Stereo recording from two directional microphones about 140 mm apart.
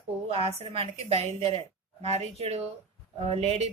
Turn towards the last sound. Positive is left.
turn(degrees=-50)  # may be behind; listen again after turning